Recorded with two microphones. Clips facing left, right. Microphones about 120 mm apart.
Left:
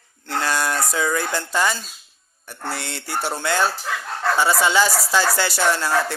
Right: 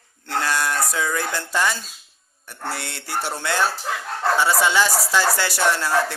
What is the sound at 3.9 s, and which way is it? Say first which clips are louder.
Speech: even; 30° right (ahead or behind).